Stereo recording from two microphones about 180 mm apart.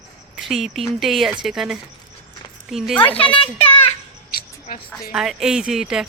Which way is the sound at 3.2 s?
30° left (ahead or behind).